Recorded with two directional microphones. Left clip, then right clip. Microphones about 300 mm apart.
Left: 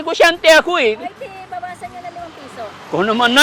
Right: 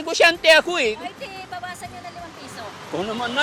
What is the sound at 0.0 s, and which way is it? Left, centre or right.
Speech, centre.